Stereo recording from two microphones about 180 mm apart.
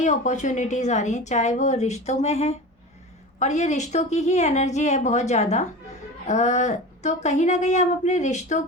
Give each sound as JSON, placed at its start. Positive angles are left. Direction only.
{"t": 0.0, "sound": "a woman's voice", "side_deg": 45}